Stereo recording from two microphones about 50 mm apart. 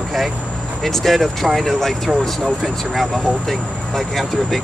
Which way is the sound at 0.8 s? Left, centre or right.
Centre.